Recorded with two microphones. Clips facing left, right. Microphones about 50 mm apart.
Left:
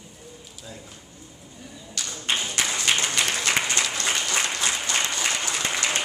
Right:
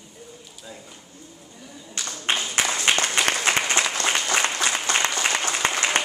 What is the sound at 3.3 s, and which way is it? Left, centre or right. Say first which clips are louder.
Applause: right 2 dB; right.